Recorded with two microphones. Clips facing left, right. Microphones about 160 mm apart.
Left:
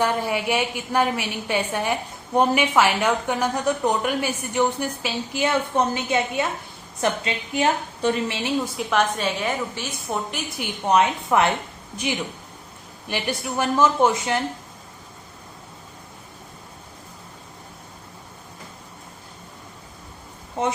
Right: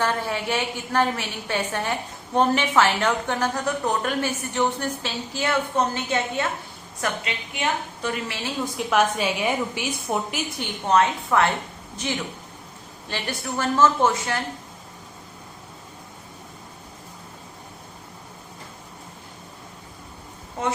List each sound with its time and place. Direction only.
0.0 s a woman's voice: 15° left (ahead or behind)
8.8 s a woman's voice: 5° right (ahead or behind)
10.6 s a woman's voice: 15° left (ahead or behind)
13.1 s a woman's voice: 15° left (ahead or behind)